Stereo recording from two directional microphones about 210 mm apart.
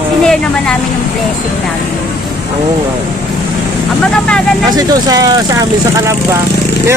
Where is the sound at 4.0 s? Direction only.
5° left (ahead or behind).